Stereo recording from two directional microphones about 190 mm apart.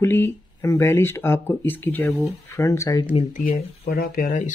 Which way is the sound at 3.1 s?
45° left (ahead or behind).